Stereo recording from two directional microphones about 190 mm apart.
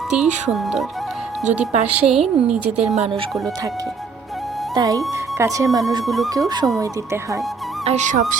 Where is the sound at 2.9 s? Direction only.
35° right (ahead or behind).